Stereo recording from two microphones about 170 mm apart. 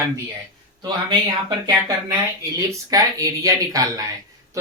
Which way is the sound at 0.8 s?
25° right (ahead or behind).